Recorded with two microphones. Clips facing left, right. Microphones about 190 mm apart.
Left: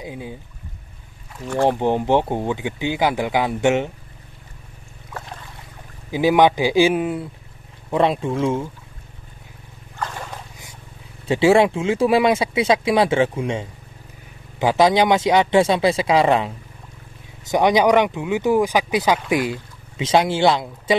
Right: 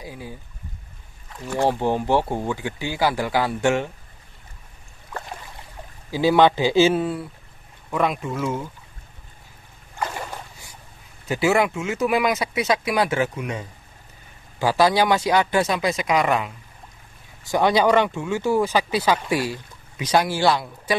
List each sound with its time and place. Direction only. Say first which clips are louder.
0.0 s speech: left 4 dB; 20° left (ahead or behind)
1.7 s speech: left 3 dB; 20° left (ahead or behind)
6.1 s speech: left 1 dB; 15° left (ahead or behind)
7.9 s speech: left 5 dB; 30° left (ahead or behind)
9.9 s boat: right 1 dB; 10° right (ahead or behind)
11.2 s speech: left 5 dB; 30° left (ahead or behind)
17.5 s speech: left 2 dB; 20° left (ahead or behind)